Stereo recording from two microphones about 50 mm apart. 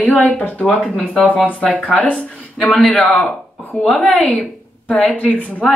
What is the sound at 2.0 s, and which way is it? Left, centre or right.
Speech, left.